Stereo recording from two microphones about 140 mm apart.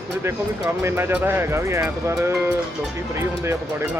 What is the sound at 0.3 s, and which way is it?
Speech, 20° right (ahead or behind).